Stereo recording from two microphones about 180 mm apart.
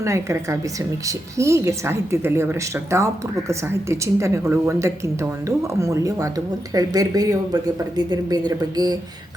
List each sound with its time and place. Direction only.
0.0 s a woman's voice: 15° right (ahead or behind)